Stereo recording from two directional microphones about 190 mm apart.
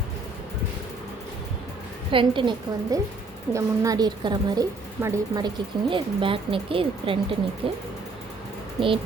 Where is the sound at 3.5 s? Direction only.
15° right (ahead or behind).